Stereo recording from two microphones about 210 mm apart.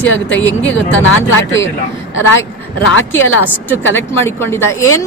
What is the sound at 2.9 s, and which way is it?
Speech, 70° left (ahead or behind).